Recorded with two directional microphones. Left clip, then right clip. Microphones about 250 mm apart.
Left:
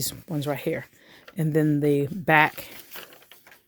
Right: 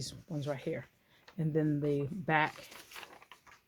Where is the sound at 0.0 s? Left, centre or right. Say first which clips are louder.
Left 10 dB; left.